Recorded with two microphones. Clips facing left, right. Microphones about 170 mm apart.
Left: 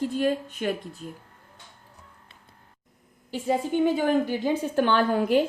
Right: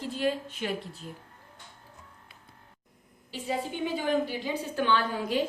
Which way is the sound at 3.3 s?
50° left (ahead or behind).